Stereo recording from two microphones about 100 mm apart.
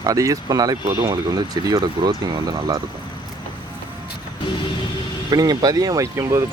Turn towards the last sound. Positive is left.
turn(degrees=-30)  # may be behind; listen again after turning